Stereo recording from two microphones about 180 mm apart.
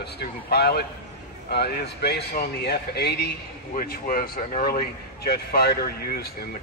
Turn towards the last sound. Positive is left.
turn(degrees=60)  # may be behind; listen again after turning